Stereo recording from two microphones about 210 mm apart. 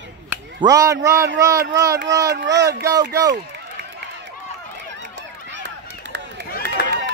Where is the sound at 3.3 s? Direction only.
55° right (ahead or behind).